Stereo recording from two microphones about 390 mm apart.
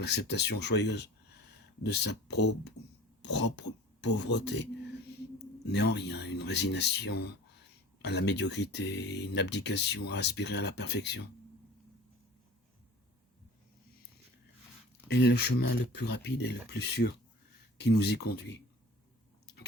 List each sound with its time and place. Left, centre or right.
0.3 s speech: left
15.1 s speech: left
18.2 s speech: left